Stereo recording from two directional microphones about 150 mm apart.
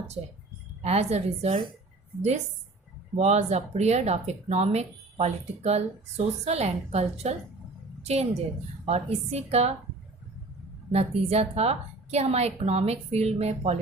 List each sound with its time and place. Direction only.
0.8 s speech: 45° right (ahead or behind)
3.2 s a woman's voice: 50° right (ahead or behind)
10.9 s speech: 45° right (ahead or behind)